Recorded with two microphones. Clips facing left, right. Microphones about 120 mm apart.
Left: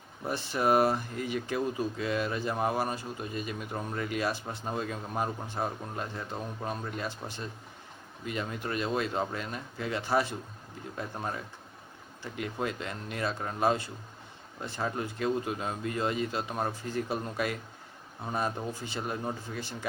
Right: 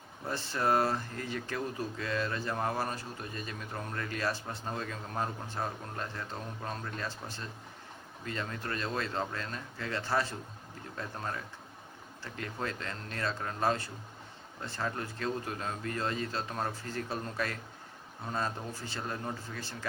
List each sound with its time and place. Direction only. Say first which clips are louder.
0.3 s speech: left 3 dB; 15° left (ahead or behind)